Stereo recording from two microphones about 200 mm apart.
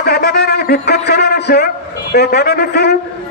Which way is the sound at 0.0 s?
50° left (ahead or behind).